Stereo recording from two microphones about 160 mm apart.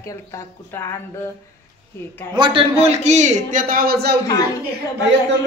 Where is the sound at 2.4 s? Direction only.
30° right (ahead or behind).